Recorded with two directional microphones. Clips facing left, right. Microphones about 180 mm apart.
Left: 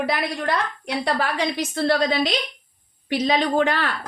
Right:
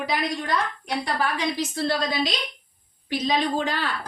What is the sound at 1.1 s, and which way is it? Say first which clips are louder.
A woman's voice: left 2 dB; 60° left (ahead or behind).